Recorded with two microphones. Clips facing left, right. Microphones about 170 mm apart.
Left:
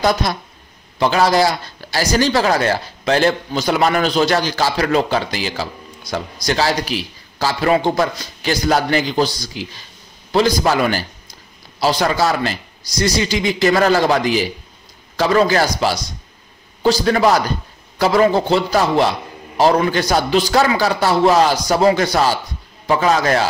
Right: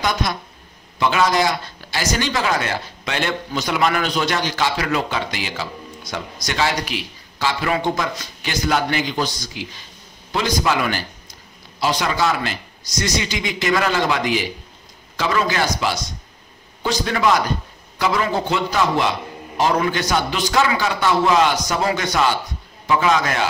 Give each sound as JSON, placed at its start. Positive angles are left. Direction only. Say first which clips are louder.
{"t": 0.0, "sound": "a man's voice", "louder": "left 5 dB", "side_deg": 35}